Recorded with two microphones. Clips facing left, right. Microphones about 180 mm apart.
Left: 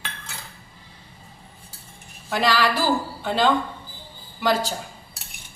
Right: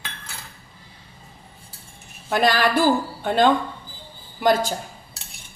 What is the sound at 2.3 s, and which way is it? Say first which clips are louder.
A woman's voice: right 2 dB; 50° right (ahead or behind).